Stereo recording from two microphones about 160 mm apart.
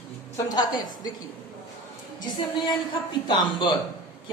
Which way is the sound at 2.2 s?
30° left (ahead or behind).